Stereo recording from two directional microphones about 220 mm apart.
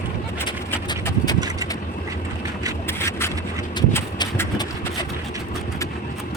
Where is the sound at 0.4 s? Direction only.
20° left (ahead or behind).